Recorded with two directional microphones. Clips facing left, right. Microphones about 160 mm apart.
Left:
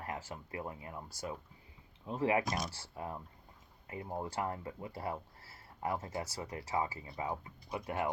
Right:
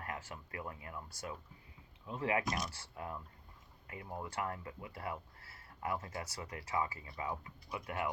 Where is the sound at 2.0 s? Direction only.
30° left (ahead or behind).